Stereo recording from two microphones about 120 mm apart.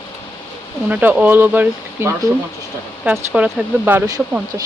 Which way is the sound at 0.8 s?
15° right (ahead or behind).